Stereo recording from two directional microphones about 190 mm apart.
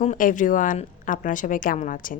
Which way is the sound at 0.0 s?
40° left (ahead or behind).